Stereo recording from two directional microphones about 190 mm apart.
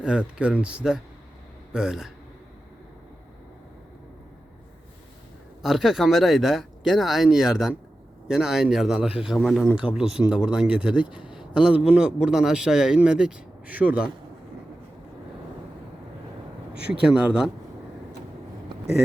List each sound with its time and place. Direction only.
0.0 s a man's voice: 5° right (ahead or behind)
5.6 s a man's voice: centre (ahead or behind)
16.9 s a man's voice: 5° right (ahead or behind)